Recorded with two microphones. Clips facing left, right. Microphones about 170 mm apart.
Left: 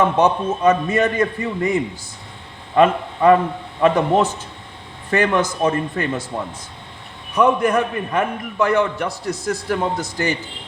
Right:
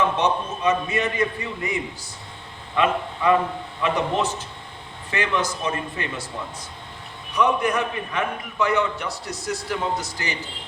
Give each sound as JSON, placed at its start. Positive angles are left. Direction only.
{"t": 0.2, "sound": "a man's voice", "side_deg": 50}
{"t": 2.7, "sound": "a man's voice", "side_deg": 50}
{"t": 7.3, "sound": "a man's voice", "side_deg": 50}